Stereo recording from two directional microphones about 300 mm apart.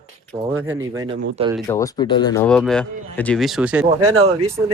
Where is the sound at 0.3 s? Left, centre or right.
Centre.